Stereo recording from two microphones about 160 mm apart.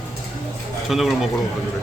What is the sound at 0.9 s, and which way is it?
Speech, centre (ahead or behind).